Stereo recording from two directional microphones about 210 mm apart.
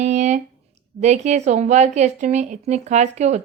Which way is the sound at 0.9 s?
35° right (ahead or behind).